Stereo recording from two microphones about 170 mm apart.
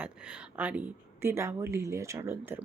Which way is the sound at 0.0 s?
5° right (ahead or behind).